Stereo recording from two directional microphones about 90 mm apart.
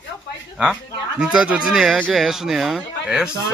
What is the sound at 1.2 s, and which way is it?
Speech, 10° right (ahead or behind).